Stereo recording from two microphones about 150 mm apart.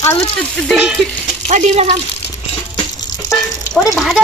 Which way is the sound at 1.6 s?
45° right (ahead or behind).